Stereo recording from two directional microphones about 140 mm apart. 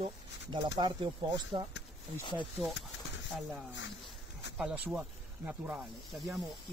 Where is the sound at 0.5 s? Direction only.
30° right (ahead or behind).